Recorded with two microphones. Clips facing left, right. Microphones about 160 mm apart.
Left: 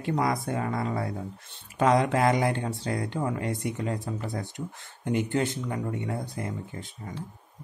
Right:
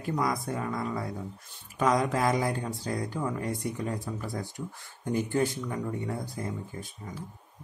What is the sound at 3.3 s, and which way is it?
Speech, 70° left (ahead or behind).